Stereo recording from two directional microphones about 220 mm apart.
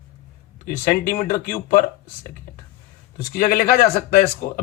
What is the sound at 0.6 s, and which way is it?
A man's voice, 35° left (ahead or behind).